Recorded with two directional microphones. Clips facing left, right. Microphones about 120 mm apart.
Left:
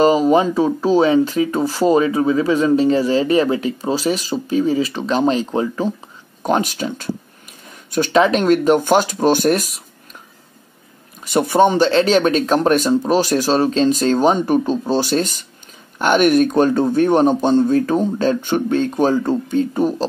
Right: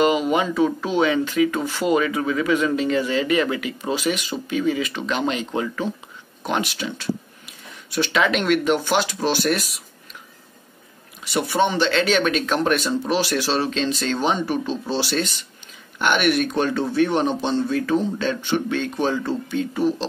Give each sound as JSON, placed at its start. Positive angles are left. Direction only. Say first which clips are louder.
{"t": 0.0, "sound": "speech", "louder": "left 6 dB", "side_deg": 35}
{"t": 11.2, "sound": "speech", "louder": "left 7 dB", "side_deg": 45}